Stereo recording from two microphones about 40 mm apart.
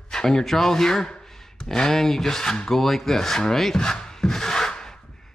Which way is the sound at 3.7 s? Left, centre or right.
Centre.